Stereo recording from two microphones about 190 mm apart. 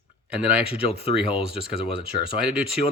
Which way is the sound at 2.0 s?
5° right (ahead or behind).